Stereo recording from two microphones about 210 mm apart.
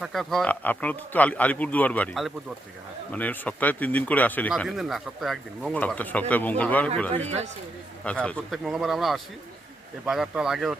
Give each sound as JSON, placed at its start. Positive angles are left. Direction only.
{"t": 0.0, "sound": "speech", "side_deg": 0}
{"t": 7.1, "sound": "speech", "side_deg": -30}
{"t": 8.0, "sound": "speech", "side_deg": 5}